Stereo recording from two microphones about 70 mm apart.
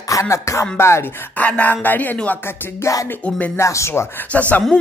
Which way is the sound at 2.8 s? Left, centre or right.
Left.